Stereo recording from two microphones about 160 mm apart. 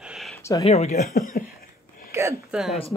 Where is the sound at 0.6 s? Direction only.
40° left (ahead or behind).